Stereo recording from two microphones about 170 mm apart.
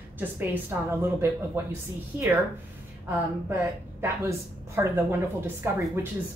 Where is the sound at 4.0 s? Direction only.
15° right (ahead or behind).